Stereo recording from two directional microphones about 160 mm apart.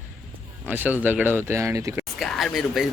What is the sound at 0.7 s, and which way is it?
Speech, 10° right (ahead or behind).